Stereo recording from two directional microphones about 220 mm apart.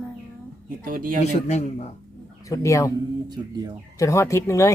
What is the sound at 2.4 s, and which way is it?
Speech, 15° left (ahead or behind).